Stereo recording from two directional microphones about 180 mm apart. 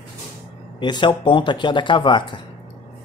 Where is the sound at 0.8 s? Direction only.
25° left (ahead or behind).